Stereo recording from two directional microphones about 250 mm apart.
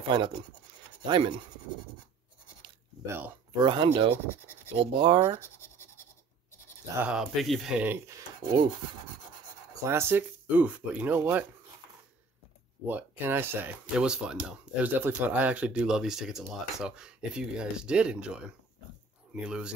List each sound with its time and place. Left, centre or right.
1.0 s speech: centre
2.6 s a sound: centre
3.6 s speech: centre
5.6 s scratch: centre
7.0 s speech: centre
9.8 s speech: centre
12.8 s speech: centre
19.4 s speech: centre